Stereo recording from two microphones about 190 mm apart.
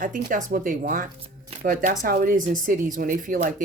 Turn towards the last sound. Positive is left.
turn(degrees=-45)  # may be behind; listen again after turning